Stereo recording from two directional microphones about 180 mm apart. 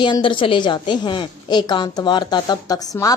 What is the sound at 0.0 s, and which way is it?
A woman's voice, 25° left (ahead or behind).